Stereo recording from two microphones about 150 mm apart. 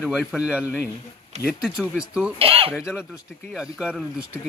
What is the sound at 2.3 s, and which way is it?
Speech, 40° right (ahead or behind).